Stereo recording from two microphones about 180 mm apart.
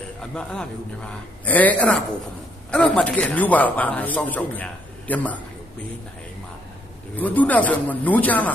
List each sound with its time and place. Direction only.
0.2 s a man's voice: 5° left (ahead or behind)
7.2 s a man's voice: 10° left (ahead or behind)